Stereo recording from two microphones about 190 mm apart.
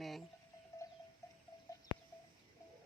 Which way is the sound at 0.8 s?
15° left (ahead or behind).